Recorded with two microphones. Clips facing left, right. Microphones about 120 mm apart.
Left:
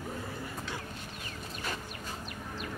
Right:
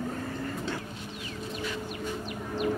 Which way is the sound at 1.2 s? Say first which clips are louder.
Right 6 dB; 45° left (ahead or behind).